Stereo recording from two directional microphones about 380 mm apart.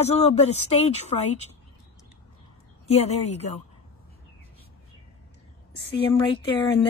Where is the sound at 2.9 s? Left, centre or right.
Centre.